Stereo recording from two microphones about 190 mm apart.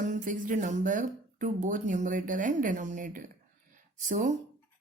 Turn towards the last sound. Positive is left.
turn(degrees=-40)  # may be behind; listen again after turning